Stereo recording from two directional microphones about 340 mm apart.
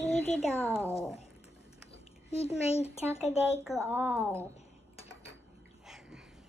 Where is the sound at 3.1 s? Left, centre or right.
Centre.